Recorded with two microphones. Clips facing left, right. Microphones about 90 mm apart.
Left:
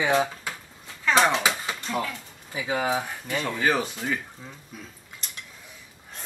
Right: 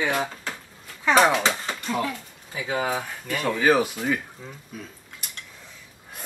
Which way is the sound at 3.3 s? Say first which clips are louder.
Right 4 dB; 5° right (ahead or behind).